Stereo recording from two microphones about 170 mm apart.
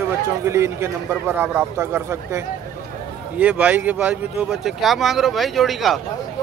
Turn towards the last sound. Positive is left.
turn(degrees=0)  # may be behind; listen again after turning